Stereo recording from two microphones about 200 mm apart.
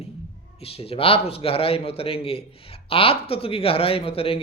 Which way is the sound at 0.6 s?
30° left (ahead or behind).